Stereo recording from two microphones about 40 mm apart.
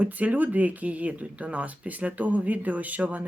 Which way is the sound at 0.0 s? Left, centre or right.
Right.